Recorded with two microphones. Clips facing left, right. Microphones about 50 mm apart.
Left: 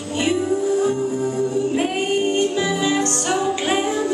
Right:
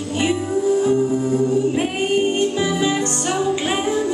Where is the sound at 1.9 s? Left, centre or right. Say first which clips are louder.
Right 1 dB; centre.